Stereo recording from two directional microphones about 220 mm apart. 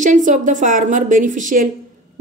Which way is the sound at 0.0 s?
35° right (ahead or behind).